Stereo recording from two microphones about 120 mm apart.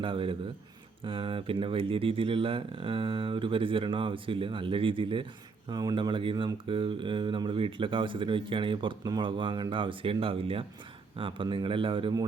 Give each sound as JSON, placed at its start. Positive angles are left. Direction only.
{"t": 0.0, "sound": "speech", "side_deg": -45}